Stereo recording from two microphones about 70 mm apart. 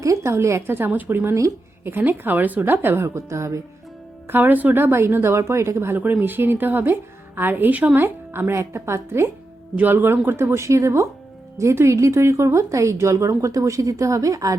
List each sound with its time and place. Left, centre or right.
0.0 s speech: right
0.9 s a woman's voice: right
3.2 s speech: right
4.3 s a woman's voice: right
6.0 s a woman's voice: right
7.9 s a woman's voice: right
9.7 s a woman's voice: right